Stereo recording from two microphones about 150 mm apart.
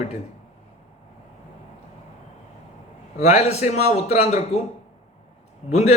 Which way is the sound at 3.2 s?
45° left (ahead or behind).